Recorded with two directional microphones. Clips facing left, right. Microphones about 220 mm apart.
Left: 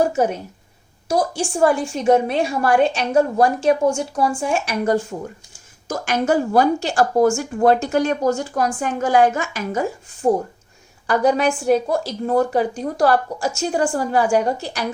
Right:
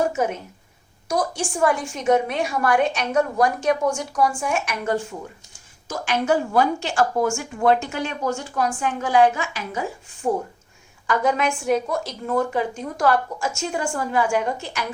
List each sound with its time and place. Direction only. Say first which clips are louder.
0.0 s a woman's voice: left 4 dB; 35° left (ahead or behind)
5.9 s a woman's voice: left 2 dB; 45° left (ahead or behind)